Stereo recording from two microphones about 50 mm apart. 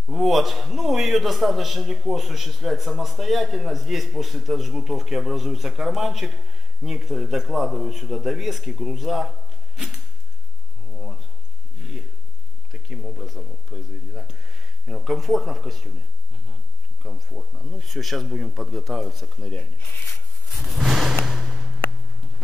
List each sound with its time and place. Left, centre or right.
0.1 s a man's voice: centre
12.7 s a sound: centre
13.7 s speech: centre
17.0 s speech: centre
17.8 s speech: centre
18.3 s a man's voice: centre
18.6 s speech: centre
20.5 s a sound: centre